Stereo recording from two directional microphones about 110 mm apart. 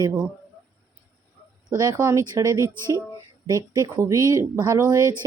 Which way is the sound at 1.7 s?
35° right (ahead or behind).